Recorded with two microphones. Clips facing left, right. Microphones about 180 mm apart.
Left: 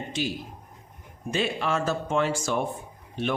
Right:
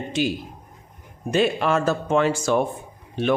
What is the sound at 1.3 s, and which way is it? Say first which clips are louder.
Speech: right 7 dB; 55° right (ahead or behind).